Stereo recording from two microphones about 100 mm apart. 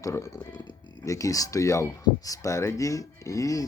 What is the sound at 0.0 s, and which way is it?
Speech, 30° left (ahead or behind).